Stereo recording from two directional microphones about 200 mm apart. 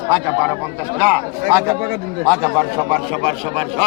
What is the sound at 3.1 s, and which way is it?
Speech, 30° right (ahead or behind).